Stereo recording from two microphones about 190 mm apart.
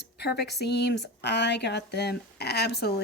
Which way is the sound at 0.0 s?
60° left (ahead or behind).